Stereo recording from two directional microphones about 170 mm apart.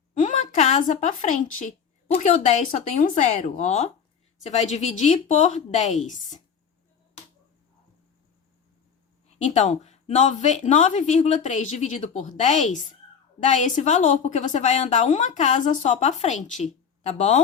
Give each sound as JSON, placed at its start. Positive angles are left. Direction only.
{"t": 0.1, "sound": "a woman's voice", "side_deg": 45}
{"t": 9.4, "sound": "a woman's voice", "side_deg": 45}